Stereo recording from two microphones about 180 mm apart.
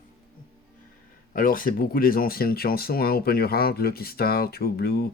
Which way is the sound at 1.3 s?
50° left (ahead or behind).